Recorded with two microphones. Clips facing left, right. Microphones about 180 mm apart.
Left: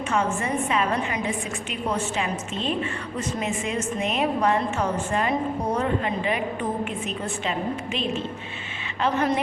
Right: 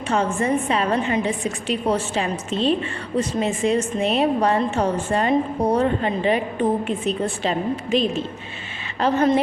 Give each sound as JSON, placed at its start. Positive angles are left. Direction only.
{"t": 0.1, "sound": "a woman's voice", "side_deg": -35}